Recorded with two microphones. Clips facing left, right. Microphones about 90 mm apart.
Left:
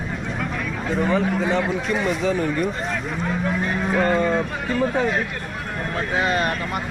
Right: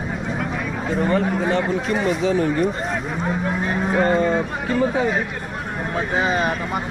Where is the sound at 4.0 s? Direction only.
20° right (ahead or behind).